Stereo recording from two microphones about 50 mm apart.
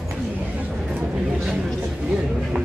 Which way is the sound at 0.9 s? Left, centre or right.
Right.